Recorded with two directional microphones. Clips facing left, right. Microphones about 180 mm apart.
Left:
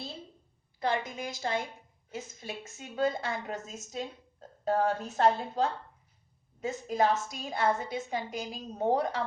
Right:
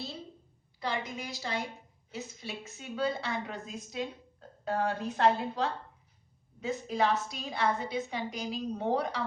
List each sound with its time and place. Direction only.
0.8 s a woman's voice: 50° left (ahead or behind)